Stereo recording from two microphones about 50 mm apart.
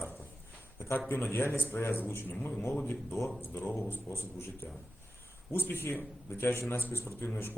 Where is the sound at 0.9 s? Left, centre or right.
Left.